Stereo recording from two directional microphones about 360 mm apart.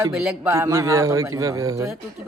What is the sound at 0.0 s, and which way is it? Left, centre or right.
A man's voice, centre.